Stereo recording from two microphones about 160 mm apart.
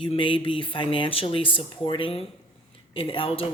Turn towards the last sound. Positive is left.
turn(degrees=35)  # may be behind; listen again after turning